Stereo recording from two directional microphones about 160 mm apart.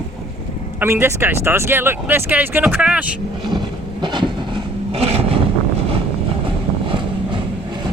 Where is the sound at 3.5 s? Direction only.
30° right (ahead or behind).